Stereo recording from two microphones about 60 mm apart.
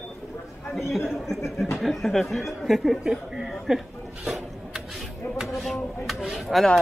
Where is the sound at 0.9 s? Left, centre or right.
Centre.